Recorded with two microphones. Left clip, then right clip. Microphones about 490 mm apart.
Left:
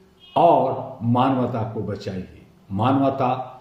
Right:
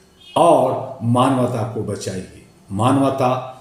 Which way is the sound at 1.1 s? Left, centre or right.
Left.